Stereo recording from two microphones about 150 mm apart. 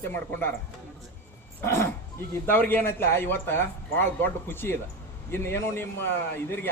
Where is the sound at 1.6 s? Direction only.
15° left (ahead or behind).